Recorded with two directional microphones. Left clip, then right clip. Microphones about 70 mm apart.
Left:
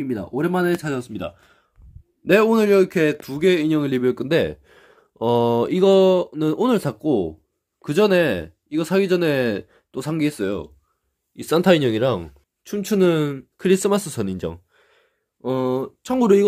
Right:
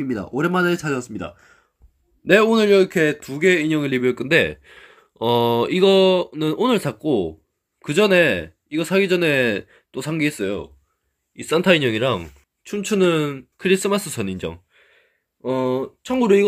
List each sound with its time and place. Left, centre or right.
0.0 s speech: centre
0.3 s speech: centre
2.5 s speech: left
3.7 s speech: left
9.9 s speech: left
13.6 s speech: left
14.2 s a sound: left
15.4 s speech: left